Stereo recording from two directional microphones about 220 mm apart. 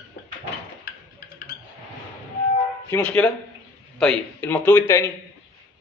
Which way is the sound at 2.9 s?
5° left (ahead or behind).